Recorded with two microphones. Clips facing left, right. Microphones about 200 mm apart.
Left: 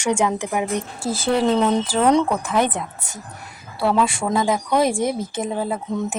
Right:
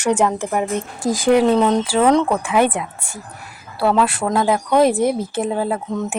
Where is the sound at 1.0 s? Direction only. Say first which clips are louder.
Right 5 dB; 15° right (ahead or behind).